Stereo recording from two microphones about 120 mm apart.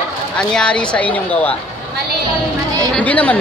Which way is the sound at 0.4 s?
5° left (ahead or behind).